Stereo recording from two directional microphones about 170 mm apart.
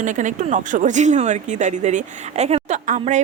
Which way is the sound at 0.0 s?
45° right (ahead or behind).